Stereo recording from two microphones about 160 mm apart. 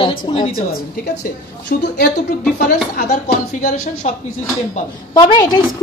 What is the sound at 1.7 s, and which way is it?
Speech, 75° left (ahead or behind).